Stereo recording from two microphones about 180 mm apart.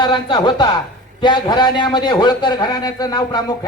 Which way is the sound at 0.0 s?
25° left (ahead or behind).